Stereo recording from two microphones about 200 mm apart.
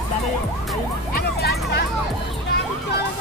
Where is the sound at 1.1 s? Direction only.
50° left (ahead or behind).